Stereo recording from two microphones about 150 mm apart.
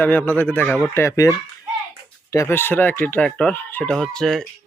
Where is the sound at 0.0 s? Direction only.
10° left (ahead or behind).